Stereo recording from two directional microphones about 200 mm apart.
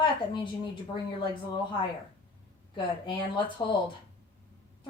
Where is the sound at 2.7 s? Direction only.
25° left (ahead or behind).